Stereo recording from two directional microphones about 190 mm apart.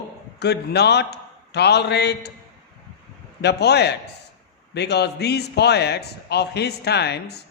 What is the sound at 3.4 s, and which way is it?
A man's voice, 60° left (ahead or behind).